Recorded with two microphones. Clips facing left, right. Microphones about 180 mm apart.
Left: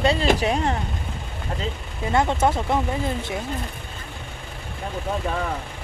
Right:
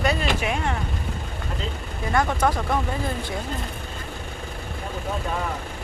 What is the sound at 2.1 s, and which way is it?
Speech, 25° left (ahead or behind).